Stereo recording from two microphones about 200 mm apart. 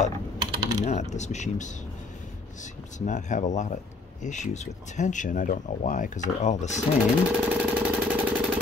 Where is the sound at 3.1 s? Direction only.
40° left (ahead or behind).